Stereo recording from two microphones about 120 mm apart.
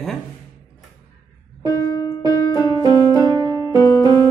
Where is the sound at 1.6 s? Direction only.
35° left (ahead or behind).